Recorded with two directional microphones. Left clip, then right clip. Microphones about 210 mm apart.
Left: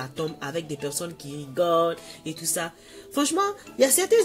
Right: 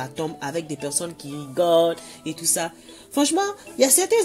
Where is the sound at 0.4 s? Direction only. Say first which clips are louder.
Right 2 dB; 15° right (ahead or behind).